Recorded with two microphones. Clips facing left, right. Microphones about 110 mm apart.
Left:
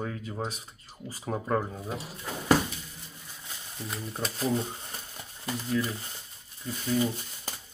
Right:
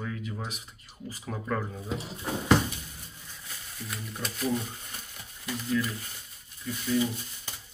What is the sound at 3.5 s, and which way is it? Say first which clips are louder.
Speech: left 2 dB; 30° left (ahead or behind).